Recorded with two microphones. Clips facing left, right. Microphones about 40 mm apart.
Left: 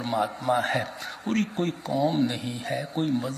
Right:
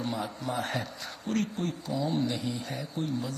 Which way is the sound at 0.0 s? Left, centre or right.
Left.